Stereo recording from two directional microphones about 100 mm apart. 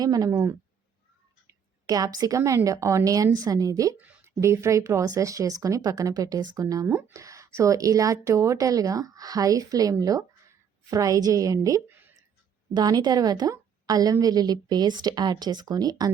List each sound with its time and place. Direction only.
0.0 s a woman's voice: 35° right (ahead or behind)
1.9 s a woman's voice: 40° right (ahead or behind)
3.9 s speech: 15° right (ahead or behind)
4.4 s a woman's voice: 30° right (ahead or behind)
11.9 s a sound: 20° right (ahead or behind)
12.7 s a woman's voice: 45° right (ahead or behind)